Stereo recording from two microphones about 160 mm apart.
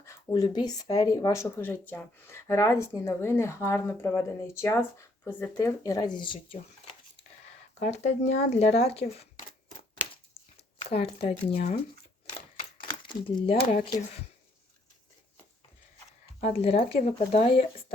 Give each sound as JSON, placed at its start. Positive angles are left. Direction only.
{"t": 0.0, "sound": "speech", "side_deg": 20}
{"t": 7.8, "sound": "speech", "side_deg": 45}
{"t": 10.8, "sound": "a sound", "side_deg": 35}
{"t": 11.3, "sound": "speech", "side_deg": 40}
{"t": 13.1, "sound": "speech", "side_deg": 30}
{"t": 16.4, "sound": "speech", "side_deg": 40}